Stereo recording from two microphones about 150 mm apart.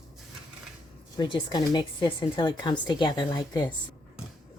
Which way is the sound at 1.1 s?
30° left (ahead or behind).